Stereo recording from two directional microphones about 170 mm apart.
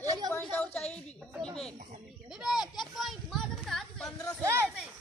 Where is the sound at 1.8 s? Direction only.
45° right (ahead or behind).